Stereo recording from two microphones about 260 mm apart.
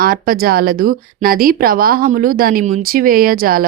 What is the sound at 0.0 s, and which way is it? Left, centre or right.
Speech, right.